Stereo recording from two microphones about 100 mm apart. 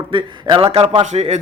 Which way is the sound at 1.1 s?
75° right (ahead or behind).